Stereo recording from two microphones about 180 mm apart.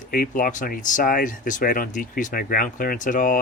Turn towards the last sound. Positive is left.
turn(degrees=50)  # may be behind; listen again after turning